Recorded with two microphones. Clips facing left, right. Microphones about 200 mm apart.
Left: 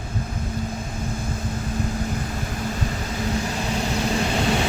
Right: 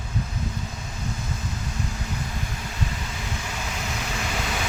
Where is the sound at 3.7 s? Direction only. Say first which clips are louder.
Left 11 dB; 35° left (ahead or behind).